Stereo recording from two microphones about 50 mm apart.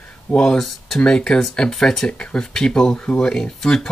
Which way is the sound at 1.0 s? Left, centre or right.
Centre.